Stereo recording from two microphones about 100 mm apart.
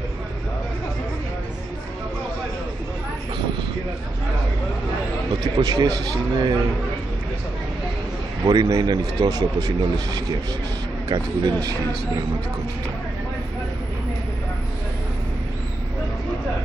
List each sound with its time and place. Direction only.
5.6 s speech: 45° right (ahead or behind)
8.5 s speech: 45° right (ahead or behind)